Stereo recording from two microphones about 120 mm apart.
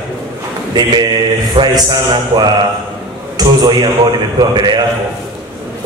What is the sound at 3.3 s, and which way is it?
Speech, 35° right (ahead or behind).